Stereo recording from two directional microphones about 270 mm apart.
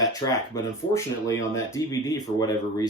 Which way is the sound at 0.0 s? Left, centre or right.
Centre.